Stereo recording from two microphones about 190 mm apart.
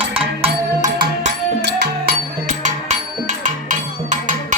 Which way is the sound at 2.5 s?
40° right (ahead or behind).